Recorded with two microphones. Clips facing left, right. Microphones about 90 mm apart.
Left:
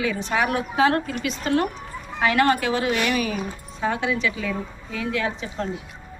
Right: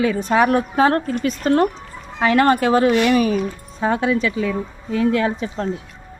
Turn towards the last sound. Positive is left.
turn(degrees=-40)  # may be behind; listen again after turning